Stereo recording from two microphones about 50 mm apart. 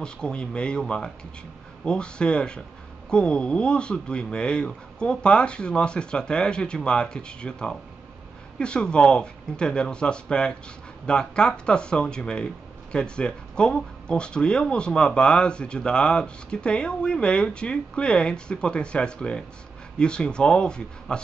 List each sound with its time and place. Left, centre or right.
0.0 s speech: centre